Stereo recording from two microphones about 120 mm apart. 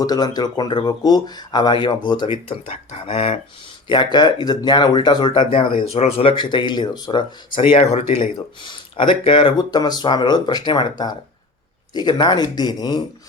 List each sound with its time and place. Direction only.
0.0 s speech: 35° left (ahead or behind); by 3.3 s 50° left (ahead or behind)
3.8 s speech: 40° left (ahead or behind)
5.7 s speech: 60° left (ahead or behind)
7.8 s speech: 60° left (ahead or behind)
8.6 s speech: 40° left (ahead or behind)